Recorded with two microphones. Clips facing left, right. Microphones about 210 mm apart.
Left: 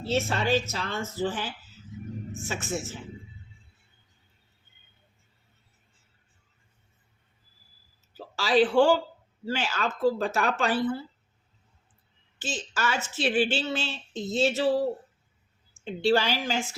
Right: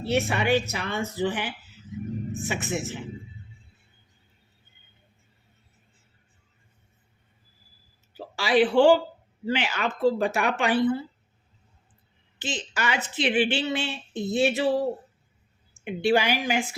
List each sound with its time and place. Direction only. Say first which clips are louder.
0.0 s speech: right 2 dB; 15° right (ahead or behind)
8.1 s speech: right 1 dB; 15° right (ahead or behind)
12.4 s speech: right 1 dB; 15° right (ahead or behind)
15.8 s speech: right 1 dB; 15° right (ahead or behind)